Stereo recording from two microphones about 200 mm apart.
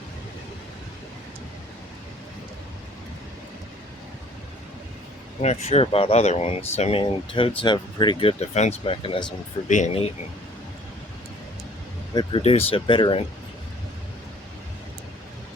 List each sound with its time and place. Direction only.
5.4 s speech: 35° left (ahead or behind)
9.6 s speech: 35° left (ahead or behind)
12.1 s speech: 30° left (ahead or behind)